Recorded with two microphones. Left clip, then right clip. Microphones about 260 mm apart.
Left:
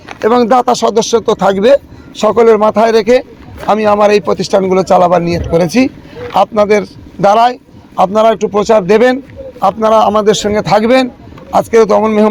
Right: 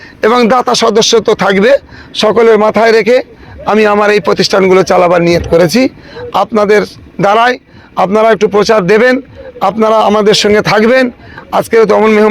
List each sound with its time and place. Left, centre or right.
0.2 s a man's voice: right
2.8 s a man's voice: right